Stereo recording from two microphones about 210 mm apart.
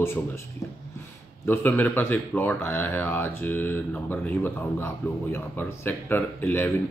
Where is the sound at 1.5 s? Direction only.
10° left (ahead or behind).